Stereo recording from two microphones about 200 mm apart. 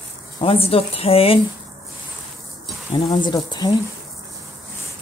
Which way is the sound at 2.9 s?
25° left (ahead or behind).